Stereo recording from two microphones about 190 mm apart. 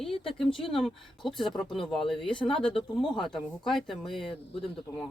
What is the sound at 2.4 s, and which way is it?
Speech, 30° left (ahead or behind).